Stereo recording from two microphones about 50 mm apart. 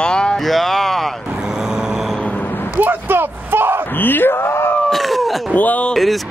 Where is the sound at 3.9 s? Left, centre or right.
Left.